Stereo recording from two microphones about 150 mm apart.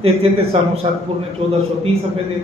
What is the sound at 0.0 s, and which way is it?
Speech, 40° right (ahead or behind).